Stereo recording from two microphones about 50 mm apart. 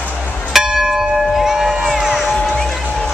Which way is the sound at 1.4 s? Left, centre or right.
Centre.